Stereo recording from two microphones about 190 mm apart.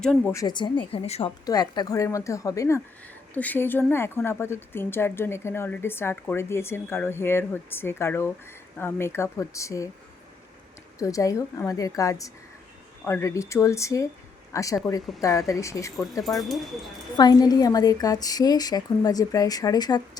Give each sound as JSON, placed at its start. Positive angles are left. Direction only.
{"t": 0.0, "sound": "speech", "side_deg": 5}
{"t": 0.3, "sound": "a woman's voice", "side_deg": 25}
{"t": 1.5, "sound": "a woman's voice", "side_deg": 20}
{"t": 11.0, "sound": "a woman's voice", "side_deg": 15}
{"t": 16.2, "sound": "speech", "side_deg": 0}
{"t": 17.2, "sound": "a woman's voice", "side_deg": 20}